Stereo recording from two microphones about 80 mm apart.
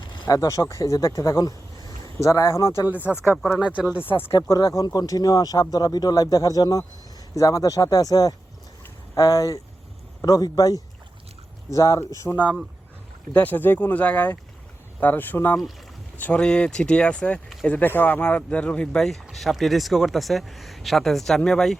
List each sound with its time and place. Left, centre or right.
0.3 s speech: left
2.1 s speech: left
2.9 s speech: centre
4.4 s speech: left
12.3 s speech: centre
13.3 s speech: left; by 21.8 s centre